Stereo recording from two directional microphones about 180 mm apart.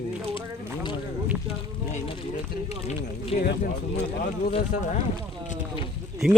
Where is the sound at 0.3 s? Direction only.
25° left (ahead or behind).